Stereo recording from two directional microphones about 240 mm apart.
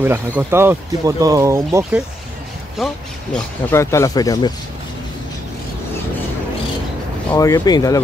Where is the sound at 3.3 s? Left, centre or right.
Centre.